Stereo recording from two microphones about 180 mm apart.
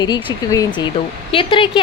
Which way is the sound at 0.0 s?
25° left (ahead or behind).